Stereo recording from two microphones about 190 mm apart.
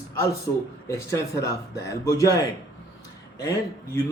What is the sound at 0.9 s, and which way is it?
Speech, 15° left (ahead or behind).